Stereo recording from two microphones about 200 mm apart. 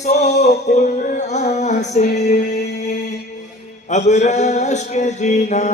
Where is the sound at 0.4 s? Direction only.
35° left (ahead or behind).